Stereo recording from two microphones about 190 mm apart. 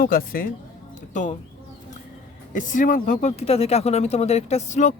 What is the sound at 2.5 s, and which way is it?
Speech, 40° left (ahead or behind).